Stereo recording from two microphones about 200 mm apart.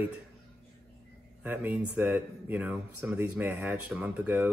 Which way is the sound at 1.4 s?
10° right (ahead or behind).